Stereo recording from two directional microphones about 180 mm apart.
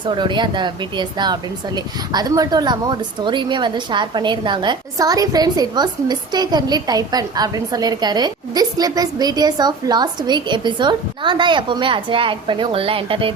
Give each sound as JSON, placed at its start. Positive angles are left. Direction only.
{"t": 0.0, "sound": "speech", "side_deg": -25}